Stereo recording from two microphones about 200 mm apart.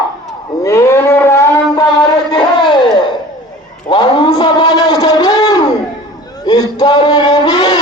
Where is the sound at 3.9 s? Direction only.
25° left (ahead or behind).